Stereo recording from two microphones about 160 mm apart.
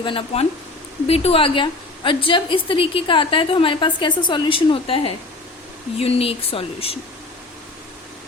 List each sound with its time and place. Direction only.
0.0 s a woman's voice: 35° left (ahead or behind)